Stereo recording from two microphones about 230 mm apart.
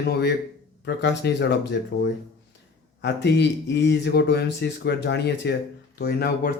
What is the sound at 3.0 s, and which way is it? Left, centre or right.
Speech, left.